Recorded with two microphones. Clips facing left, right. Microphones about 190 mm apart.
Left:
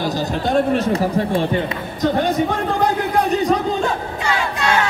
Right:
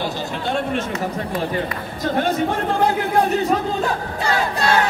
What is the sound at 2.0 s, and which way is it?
Speech, 15° left (ahead or behind).